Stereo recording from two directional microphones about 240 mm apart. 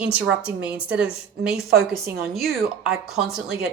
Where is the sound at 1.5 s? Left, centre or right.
Right.